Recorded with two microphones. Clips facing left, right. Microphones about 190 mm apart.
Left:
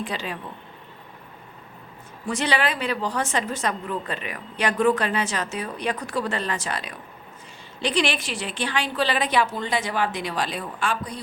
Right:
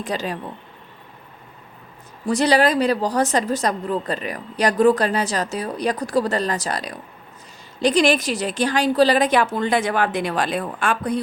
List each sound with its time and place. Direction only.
0.0 s a woman's voice: 40° right (ahead or behind)
2.2 s a woman's voice: 40° right (ahead or behind); by 11.2 s 55° right (ahead or behind)